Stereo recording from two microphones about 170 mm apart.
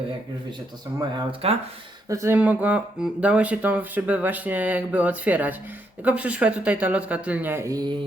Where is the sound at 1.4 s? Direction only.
35° right (ahead or behind).